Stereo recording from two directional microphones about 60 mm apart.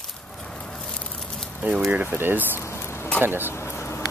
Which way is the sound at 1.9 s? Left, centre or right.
Right.